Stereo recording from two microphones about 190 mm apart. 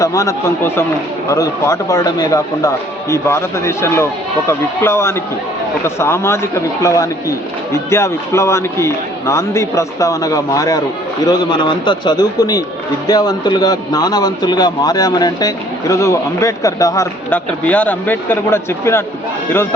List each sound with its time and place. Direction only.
0.0 s a man's voice: 15° left (ahead or behind)